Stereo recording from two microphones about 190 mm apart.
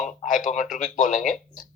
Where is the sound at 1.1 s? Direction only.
Centre (ahead or behind).